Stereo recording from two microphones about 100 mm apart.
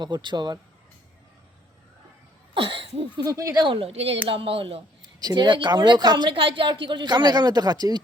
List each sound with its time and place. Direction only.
0.0 s a woman's voice: 50° right (ahead or behind)
2.6 s cough: 60° right (ahead or behind)
3.2 s speech: 35° right (ahead or behind)
3.6 s speech: 60° right (ahead or behind)
4.3 s cough: 65° right (ahead or behind)
5.0 s a woman's voice: 45° right (ahead or behind)